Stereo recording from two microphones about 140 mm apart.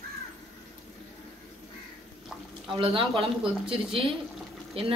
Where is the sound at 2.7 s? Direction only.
40° right (ahead or behind).